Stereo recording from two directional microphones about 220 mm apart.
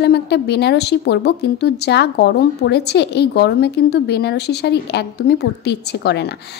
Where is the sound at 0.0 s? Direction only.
50° left (ahead or behind).